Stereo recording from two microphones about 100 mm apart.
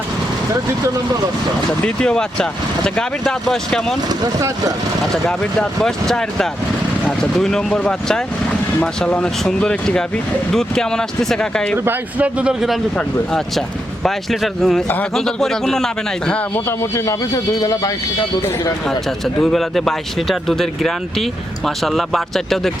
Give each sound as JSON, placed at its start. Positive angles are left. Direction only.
{"t": 1.8, "sound": "speech", "side_deg": 10}
{"t": 4.2, "sound": "speech", "side_deg": -35}
{"t": 5.1, "sound": "speech", "side_deg": 5}
{"t": 11.9, "sound": "speech", "side_deg": -15}
{"t": 14.0, "sound": "speech", "side_deg": 0}
{"t": 16.6, "sound": "a man's voice", "side_deg": 30}
{"t": 18.9, "sound": "speech", "side_deg": 5}